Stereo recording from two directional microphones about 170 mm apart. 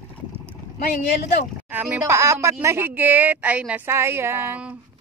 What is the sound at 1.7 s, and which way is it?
Speech, 10° right (ahead or behind).